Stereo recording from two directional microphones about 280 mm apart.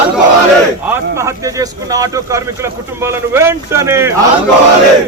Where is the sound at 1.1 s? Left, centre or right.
Centre.